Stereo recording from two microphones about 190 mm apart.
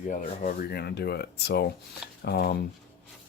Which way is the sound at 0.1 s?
40° left (ahead or behind).